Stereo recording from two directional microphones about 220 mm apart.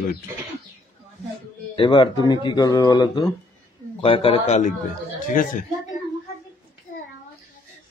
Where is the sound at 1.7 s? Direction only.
20° left (ahead or behind); by 6.0 s 40° left (ahead or behind).